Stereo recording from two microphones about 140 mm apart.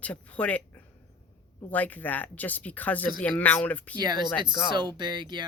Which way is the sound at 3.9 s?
30° right (ahead or behind).